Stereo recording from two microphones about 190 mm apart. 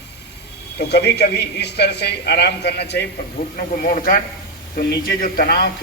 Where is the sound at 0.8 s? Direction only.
60° left (ahead or behind).